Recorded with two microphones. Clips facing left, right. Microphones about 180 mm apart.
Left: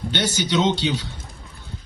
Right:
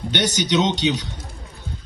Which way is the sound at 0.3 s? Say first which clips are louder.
Even; 20° right (ahead or behind).